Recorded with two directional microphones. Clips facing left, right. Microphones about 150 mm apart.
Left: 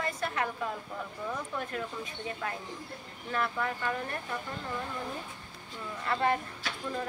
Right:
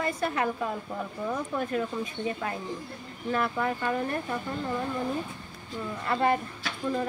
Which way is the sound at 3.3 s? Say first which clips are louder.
Right 4 dB; 15° right (ahead or behind).